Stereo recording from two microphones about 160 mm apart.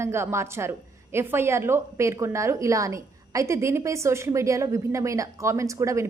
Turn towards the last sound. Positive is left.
turn(degrees=-20)  # may be behind; listen again after turning